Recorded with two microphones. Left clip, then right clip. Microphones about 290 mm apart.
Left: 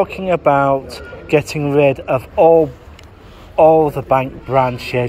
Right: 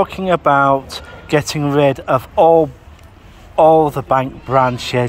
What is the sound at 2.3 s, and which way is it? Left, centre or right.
Speech, right.